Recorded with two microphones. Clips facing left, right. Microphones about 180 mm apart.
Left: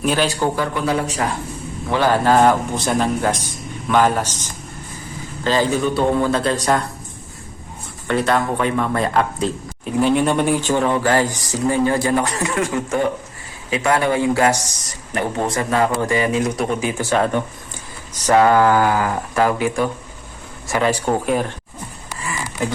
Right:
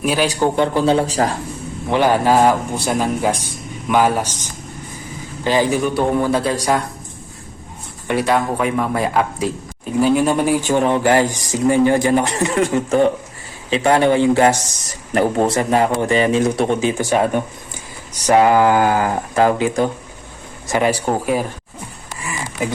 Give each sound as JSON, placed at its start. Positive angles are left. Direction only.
{"t": 0.0, "sound": "speech", "side_deg": -10}
{"t": 1.9, "sound": "speech", "side_deg": -15}
{"t": 8.0, "sound": "speech", "side_deg": -10}
{"t": 17.0, "sound": "speech", "side_deg": -15}